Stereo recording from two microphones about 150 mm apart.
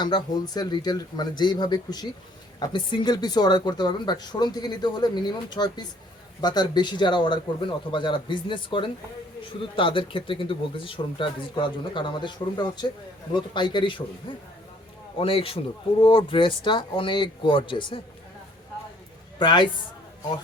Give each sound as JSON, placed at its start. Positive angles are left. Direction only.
{"t": 0.0, "sound": "speech", "side_deg": 30}
{"t": 15.2, "sound": "speech", "side_deg": 40}
{"t": 19.4, "sound": "speech", "side_deg": 30}